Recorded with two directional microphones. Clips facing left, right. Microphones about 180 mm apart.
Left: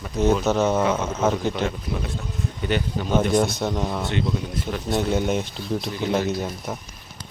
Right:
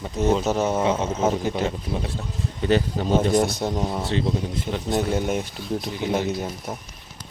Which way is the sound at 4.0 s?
30° right (ahead or behind).